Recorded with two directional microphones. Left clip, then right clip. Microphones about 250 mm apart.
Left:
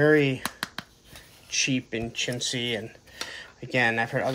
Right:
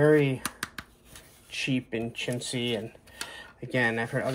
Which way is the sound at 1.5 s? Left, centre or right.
Centre.